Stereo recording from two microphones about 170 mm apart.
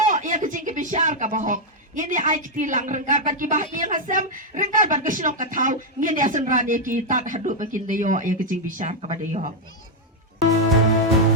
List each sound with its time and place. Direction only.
0.0 s speech: 45° right (ahead or behind)